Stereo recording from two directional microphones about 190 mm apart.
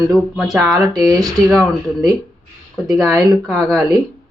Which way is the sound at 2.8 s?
20° right (ahead or behind).